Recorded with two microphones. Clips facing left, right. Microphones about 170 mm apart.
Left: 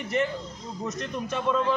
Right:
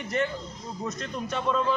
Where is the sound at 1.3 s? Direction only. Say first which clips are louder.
Left 1 dB; 10° left (ahead or behind).